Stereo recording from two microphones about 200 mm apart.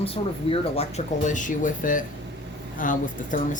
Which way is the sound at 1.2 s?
40° left (ahead or behind).